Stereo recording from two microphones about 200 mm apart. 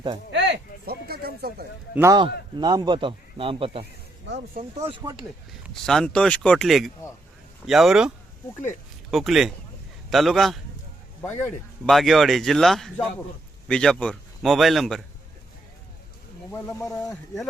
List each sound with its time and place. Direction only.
0.3 s speech: 60° right (ahead or behind)
2.0 s a man's voice: 20° right (ahead or behind)
5.7 s a man's voice: centre (ahead or behind)
11.2 s speech: 10° left (ahead or behind)
11.9 s speech: centre (ahead or behind)
16.5 s speech: 15° left (ahead or behind)